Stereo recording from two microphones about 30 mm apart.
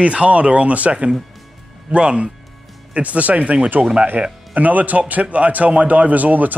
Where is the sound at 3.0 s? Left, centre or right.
Right.